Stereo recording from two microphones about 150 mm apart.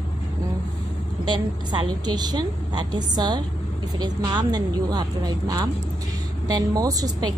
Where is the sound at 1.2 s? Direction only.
30° right (ahead or behind).